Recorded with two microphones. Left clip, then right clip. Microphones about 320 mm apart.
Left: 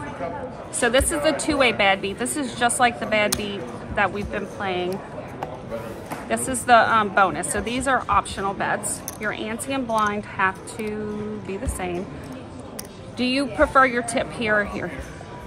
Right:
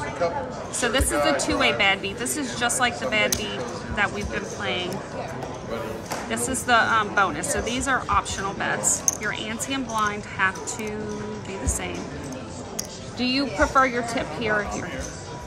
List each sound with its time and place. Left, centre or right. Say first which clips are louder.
0.7 s speech: left 3 dB; left
6.3 s speech: left 4 dB; left
13.2 s speech: left 2 dB; left